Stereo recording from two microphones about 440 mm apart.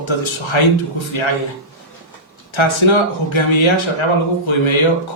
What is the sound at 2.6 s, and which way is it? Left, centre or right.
Speech, left.